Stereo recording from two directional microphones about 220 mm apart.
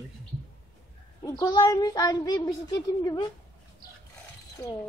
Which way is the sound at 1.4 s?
20° left (ahead or behind).